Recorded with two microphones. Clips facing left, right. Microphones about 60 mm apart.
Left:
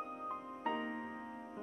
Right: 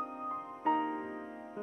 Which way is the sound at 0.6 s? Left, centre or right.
Centre.